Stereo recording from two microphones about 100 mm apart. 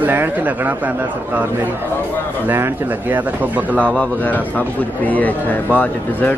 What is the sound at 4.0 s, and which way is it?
A man's voice, 15° left (ahead or behind).